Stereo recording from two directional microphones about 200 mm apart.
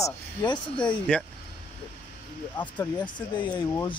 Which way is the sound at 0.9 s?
5° left (ahead or behind).